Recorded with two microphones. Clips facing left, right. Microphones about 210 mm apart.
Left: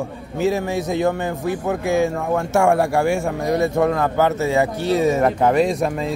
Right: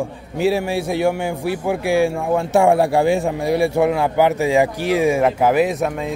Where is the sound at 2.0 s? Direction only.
15° right (ahead or behind).